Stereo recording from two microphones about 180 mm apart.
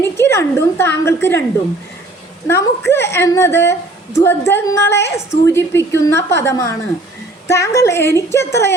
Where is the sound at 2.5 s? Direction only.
15° left (ahead or behind).